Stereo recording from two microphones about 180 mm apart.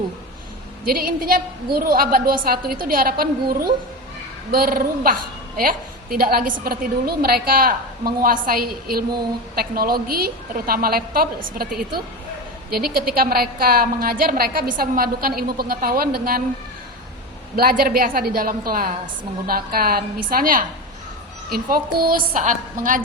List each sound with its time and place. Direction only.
0.9 s a woman's voice: 55° right (ahead or behind)
12.7 s a woman's voice: 55° right (ahead or behind)
17.6 s a woman's voice: 55° right (ahead or behind)